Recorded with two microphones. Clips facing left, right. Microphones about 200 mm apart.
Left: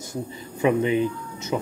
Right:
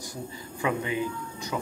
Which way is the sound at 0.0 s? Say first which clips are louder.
Left 5 dB; 25° left (ahead or behind).